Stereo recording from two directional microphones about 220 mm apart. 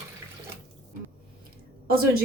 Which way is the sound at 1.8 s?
40° right (ahead or behind).